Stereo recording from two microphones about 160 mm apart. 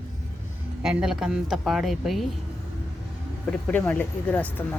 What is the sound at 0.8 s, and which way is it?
Speech, 5° right (ahead or behind).